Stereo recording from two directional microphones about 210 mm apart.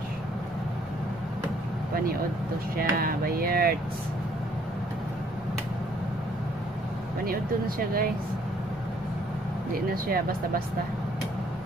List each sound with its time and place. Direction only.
2.8 s speech: 45° right (ahead or behind)
7.2 s speech: 45° right (ahead or behind)
9.8 s speech: 45° right (ahead or behind)